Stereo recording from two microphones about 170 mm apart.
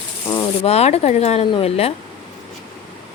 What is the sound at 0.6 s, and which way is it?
Speech, 40° left (ahead or behind).